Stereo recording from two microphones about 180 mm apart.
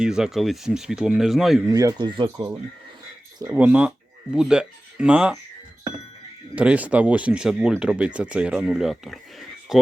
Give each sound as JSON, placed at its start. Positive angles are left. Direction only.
{"t": 0.0, "sound": "speech", "side_deg": -5}
{"t": 1.6, "sound": "speech", "side_deg": -20}
{"t": 6.6, "sound": "speech", "side_deg": -5}